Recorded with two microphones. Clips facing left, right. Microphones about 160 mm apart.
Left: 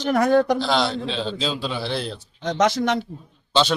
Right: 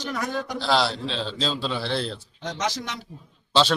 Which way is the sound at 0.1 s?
60° left (ahead or behind).